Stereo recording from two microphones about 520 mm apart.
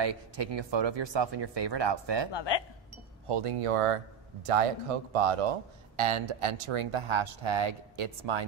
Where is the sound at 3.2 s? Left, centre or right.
Right.